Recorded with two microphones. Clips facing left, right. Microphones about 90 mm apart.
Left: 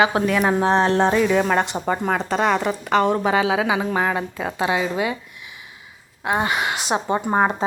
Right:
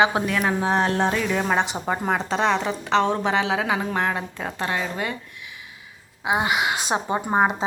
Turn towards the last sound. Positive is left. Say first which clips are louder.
# left 1 dB
turn(degrees=-5)  # may be behind; listen again after turning